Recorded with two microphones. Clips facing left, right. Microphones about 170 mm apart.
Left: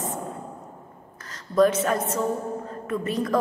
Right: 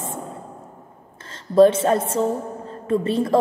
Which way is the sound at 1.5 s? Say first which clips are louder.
Right 6 dB; 30° right (ahead or behind).